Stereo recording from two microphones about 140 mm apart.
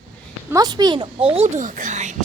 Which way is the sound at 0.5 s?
30° right (ahead or behind).